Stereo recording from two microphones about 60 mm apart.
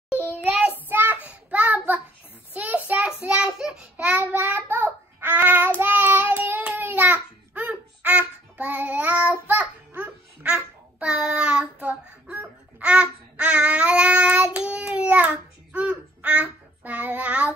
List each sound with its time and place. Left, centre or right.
0.1 s child singing: left
0.7 s child singing: right
2.5 s a sound: right
3.0 s child singing: centre
3.9 s child singing: right
6.7 s babbling: right